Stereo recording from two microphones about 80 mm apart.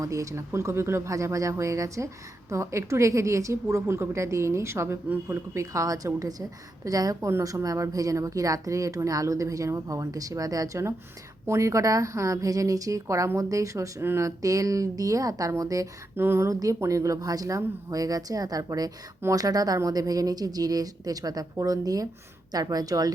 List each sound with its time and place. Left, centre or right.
0.0 s a woman's voice: right
14.0 s speech: right
14.3 s speech: right
16.1 s speech: right
16.5 s speech: right